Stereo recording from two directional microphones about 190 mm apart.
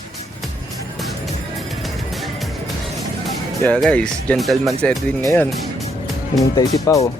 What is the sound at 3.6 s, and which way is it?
Speech, 5° left (ahead or behind).